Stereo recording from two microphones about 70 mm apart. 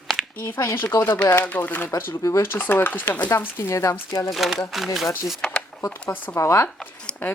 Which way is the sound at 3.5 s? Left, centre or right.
Left.